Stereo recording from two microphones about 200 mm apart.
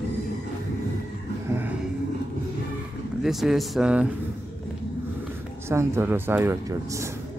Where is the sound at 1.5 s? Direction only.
10° right (ahead or behind).